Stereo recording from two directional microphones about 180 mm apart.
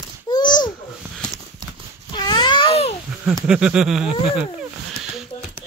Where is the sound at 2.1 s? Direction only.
25° left (ahead or behind).